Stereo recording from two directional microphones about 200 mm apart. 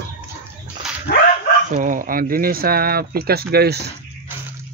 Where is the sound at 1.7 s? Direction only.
40° right (ahead or behind).